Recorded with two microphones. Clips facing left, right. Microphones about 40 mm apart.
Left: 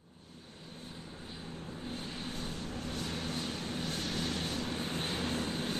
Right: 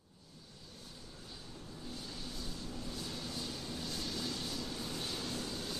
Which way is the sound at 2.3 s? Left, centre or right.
Left.